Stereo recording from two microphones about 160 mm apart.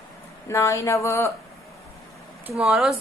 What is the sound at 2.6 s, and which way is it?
Speech, centre (ahead or behind).